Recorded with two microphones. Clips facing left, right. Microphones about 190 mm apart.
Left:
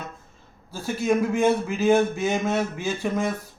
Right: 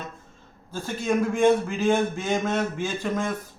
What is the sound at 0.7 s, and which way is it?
A man's voice, 5° left (ahead or behind).